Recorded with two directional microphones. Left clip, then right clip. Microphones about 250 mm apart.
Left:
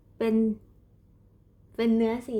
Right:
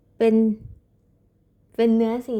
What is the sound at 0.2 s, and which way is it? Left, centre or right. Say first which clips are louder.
Speech: right 8 dB; right.